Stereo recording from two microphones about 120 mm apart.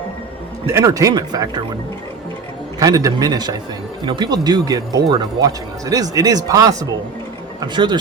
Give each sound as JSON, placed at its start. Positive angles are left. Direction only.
{"t": 0.7, "sound": "speech", "side_deg": -25}
{"t": 2.7, "sound": "speech", "side_deg": -30}